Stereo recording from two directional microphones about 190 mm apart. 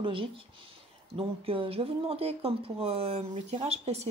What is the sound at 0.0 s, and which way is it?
Music, 25° right (ahead or behind).